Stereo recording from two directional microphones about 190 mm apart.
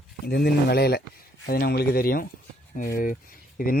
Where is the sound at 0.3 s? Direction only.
55° left (ahead or behind).